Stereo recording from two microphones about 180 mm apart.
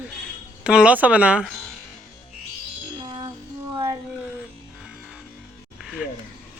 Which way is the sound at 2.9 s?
25° right (ahead or behind).